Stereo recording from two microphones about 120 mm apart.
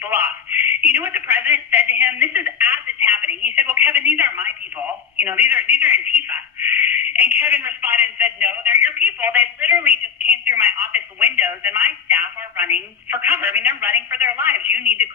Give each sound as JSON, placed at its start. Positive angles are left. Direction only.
{"t": 0.0, "sound": "a sound", "side_deg": -15}
{"t": 0.9, "sound": "speech", "side_deg": -15}
{"t": 3.5, "sound": "telephone", "side_deg": -20}
{"t": 5.2, "sound": "a woman's voice", "side_deg": -20}